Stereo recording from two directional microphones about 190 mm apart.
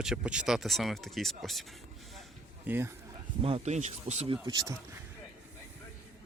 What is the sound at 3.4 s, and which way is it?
Speech, 30° right (ahead or behind).